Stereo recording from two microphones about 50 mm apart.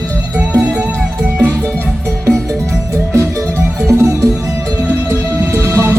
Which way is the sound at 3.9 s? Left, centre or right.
Right.